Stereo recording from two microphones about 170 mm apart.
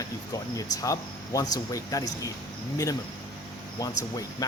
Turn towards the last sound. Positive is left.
turn(degrees=20)  # may be behind; listen again after turning